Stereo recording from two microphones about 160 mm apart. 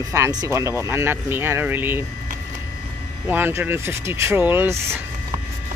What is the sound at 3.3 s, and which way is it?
Speech, 15° right (ahead or behind).